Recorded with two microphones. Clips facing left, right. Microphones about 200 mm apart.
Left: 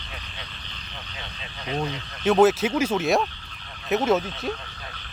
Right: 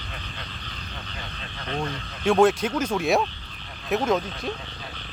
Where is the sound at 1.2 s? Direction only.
5° left (ahead or behind).